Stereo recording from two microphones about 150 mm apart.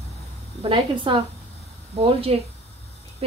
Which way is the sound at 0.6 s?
35° right (ahead or behind).